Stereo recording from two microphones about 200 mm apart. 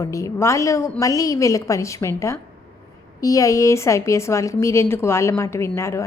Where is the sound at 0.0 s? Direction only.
15° left (ahead or behind).